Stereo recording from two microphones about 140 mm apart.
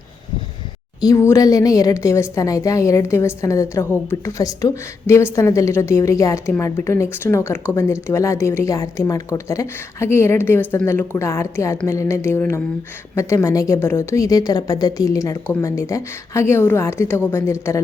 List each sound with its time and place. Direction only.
1.0 s a woman's voice: 20° left (ahead or behind)
11.9 s a sound: 20° left (ahead or behind)
13.1 s a woman's voice: 20° left (ahead or behind)